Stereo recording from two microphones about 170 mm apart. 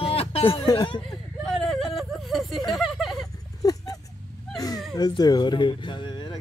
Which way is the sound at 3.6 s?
20° left (ahead or behind).